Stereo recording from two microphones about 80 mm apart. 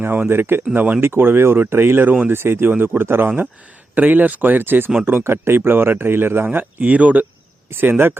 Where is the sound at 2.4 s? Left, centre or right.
Right.